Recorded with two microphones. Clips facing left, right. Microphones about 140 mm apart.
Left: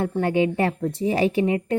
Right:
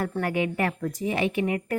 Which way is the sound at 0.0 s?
25° left (ahead or behind).